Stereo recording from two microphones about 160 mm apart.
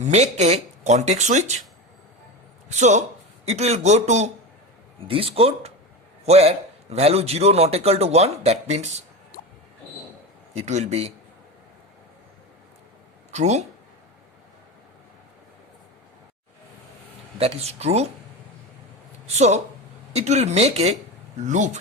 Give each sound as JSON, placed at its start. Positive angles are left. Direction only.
{"t": 0.0, "sound": "speech", "side_deg": -45}
{"t": 2.6, "sound": "speech", "side_deg": -45}
{"t": 4.9, "sound": "a man's voice", "side_deg": -35}
{"t": 10.5, "sound": "speech", "side_deg": -45}
{"t": 13.3, "sound": "speech", "side_deg": -45}
{"t": 17.3, "sound": "a man's voice", "side_deg": -40}
{"t": 19.4, "sound": "speech", "side_deg": -45}